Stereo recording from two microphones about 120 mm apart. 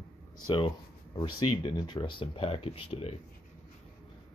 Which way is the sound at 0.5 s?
40° left (ahead or behind).